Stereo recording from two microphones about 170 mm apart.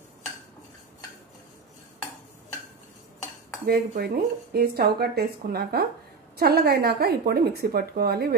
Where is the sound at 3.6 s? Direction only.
65° right (ahead or behind).